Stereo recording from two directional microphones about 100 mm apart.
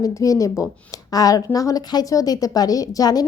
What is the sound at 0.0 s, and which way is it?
A woman's voice, 35° left (ahead or behind).